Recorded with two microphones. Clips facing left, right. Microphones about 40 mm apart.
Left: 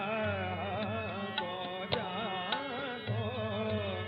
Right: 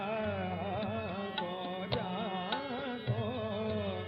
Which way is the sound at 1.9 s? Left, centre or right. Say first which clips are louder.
Left 2 dB; left.